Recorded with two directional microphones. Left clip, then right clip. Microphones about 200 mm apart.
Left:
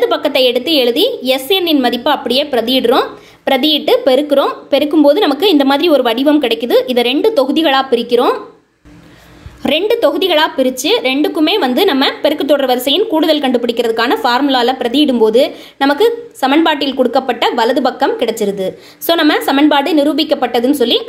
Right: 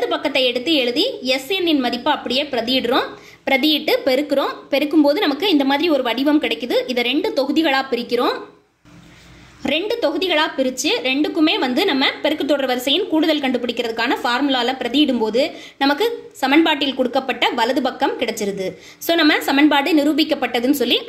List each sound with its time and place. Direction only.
0.0 s a woman's voice: 35° left (ahead or behind)
9.6 s a woman's voice: 30° left (ahead or behind)